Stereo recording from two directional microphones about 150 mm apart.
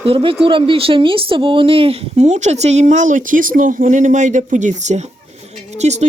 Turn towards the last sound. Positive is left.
turn(degrees=-50)  # may be behind; listen again after turning